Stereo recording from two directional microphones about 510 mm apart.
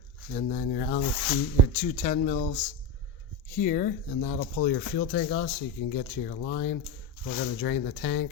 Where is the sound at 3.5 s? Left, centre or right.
Centre.